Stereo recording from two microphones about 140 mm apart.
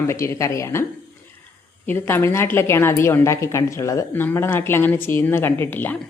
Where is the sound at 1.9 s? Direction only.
15° left (ahead or behind).